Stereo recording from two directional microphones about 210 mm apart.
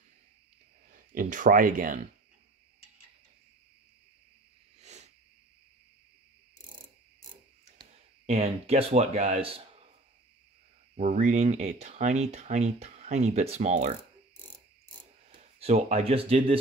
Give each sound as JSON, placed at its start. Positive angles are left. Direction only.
{"t": 0.9, "sound": "speech", "side_deg": -40}
{"t": 4.7, "sound": "a sound", "side_deg": -30}
{"t": 8.3, "sound": "speech", "side_deg": -30}
{"t": 11.0, "sound": "speech", "side_deg": -35}
{"t": 15.6, "sound": "speech", "side_deg": -30}